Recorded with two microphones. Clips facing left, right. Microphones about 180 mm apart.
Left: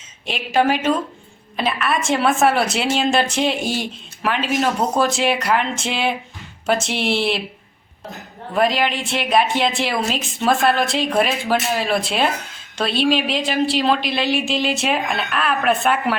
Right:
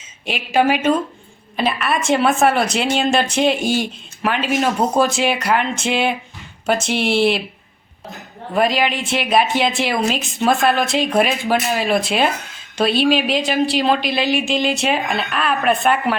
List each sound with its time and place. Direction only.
0.3 s a woman's voice: 5° right (ahead or behind)
8.5 s a woman's voice: centre (ahead or behind)